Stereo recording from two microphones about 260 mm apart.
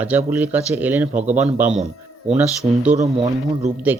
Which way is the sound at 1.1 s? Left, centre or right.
Right.